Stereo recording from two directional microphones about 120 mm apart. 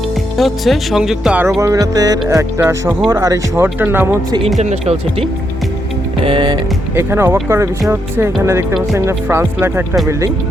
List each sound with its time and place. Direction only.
0.3 s speech: centre (ahead or behind)
1.6 s speech: 30° right (ahead or behind)
4.6 s speech: 65° right (ahead or behind)
6.2 s music: 40° right (ahead or behind)
6.9 s speech: 20° right (ahead or behind)